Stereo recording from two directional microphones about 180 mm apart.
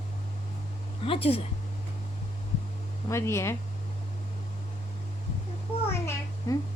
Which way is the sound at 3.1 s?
15° left (ahead or behind).